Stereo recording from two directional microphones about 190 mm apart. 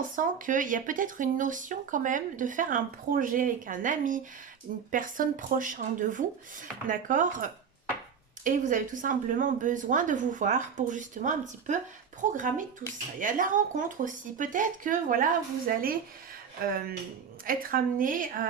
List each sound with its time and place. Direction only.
0.2 s speech: 45° right (ahead or behind)